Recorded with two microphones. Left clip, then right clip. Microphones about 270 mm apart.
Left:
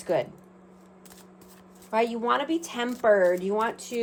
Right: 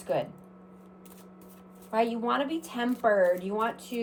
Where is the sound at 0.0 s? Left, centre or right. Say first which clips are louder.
Left 3 dB; left.